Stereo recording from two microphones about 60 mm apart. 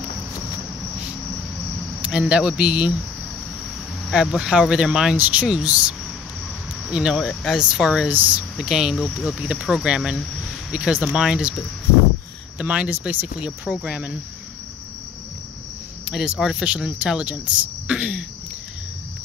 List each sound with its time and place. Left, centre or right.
2.0 s speech: centre
4.1 s speech: centre
5.1 s speech: right; by 8.1 s centre
8.1 s speech: right
8.5 s speech: centre
9.8 s speech: centre
12.5 s speech: right
16.1 s speech: centre